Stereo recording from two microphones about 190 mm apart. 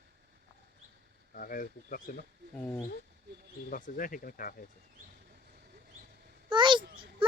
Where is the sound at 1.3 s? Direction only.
45° left (ahead or behind).